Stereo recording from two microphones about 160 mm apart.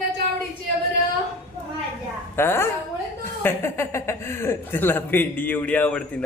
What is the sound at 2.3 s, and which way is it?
Speech, 15° left (ahead or behind).